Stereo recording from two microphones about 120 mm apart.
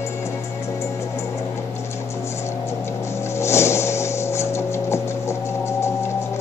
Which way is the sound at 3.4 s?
20° left (ahead or behind).